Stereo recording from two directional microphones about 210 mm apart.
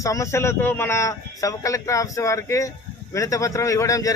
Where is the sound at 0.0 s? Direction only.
15° left (ahead or behind).